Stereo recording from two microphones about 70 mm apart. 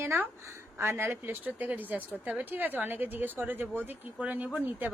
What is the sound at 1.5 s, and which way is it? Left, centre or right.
A woman's voice, right.